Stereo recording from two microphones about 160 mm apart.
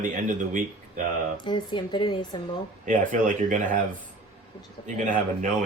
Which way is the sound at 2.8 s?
55° right (ahead or behind).